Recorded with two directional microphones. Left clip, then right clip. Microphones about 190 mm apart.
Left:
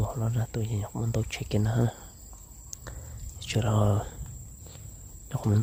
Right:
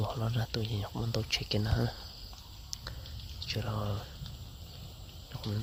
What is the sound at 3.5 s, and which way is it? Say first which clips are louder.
Speech: left 9 dB; 45° left (ahead or behind).